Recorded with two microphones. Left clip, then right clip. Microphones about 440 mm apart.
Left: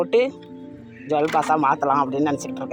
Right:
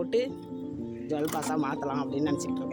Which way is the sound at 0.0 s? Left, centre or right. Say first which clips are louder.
Left 9 dB; right.